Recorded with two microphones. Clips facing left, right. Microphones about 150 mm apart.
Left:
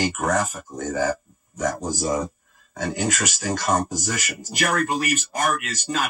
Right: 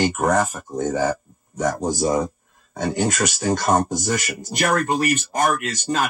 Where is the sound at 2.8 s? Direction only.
35° right (ahead or behind).